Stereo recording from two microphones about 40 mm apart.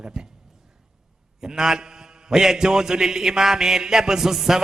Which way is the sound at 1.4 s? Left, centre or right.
Centre.